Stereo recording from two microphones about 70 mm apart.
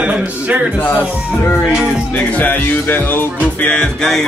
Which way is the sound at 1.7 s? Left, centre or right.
Centre.